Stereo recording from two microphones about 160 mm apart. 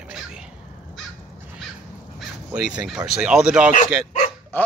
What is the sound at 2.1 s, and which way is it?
Crow, 5° right (ahead or behind).